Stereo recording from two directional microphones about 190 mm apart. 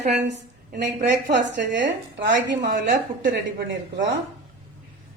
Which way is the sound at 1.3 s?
70° right (ahead or behind).